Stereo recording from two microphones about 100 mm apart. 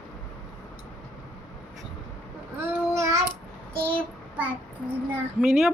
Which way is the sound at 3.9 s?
15° right (ahead or behind).